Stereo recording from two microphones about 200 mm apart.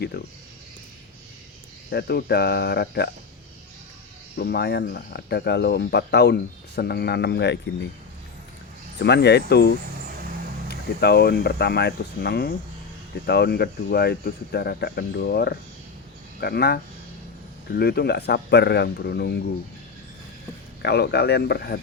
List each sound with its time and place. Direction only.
0.1 s speech: 55° left (ahead or behind)
1.9 s speech: 50° left (ahead or behind)
4.4 s speech: 50° left (ahead or behind)
9.0 s speech: 55° left (ahead or behind)
20.8 s speech: 55° left (ahead or behind)